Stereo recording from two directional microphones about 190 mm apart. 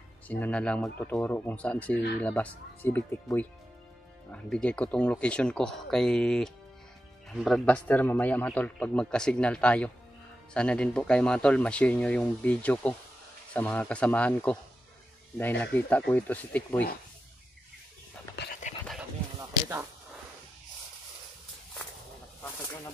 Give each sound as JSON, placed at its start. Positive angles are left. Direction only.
{"t": 0.3, "sound": "a man's voice", "side_deg": 5}
{"t": 18.6, "sound": "dog", "side_deg": 40}